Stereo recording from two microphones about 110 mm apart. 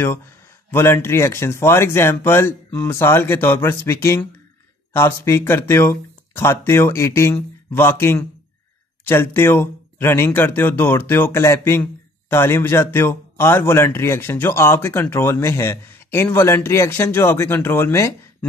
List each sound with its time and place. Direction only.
0.7 s speech: 25° left (ahead or behind)